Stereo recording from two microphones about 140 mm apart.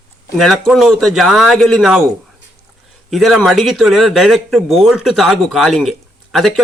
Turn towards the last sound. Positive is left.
turn(degrees=0)  # may be behind; listen again after turning